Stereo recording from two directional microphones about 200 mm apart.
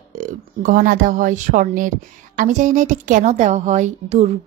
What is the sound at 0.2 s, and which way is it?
Speech, 40° right (ahead or behind).